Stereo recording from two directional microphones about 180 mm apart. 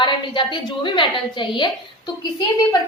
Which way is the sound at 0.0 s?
25° left (ahead or behind).